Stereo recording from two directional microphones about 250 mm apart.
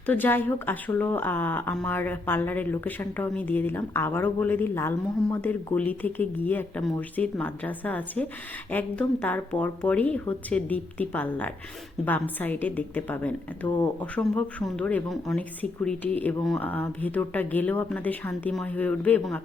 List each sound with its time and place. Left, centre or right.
0.0 s speech: centre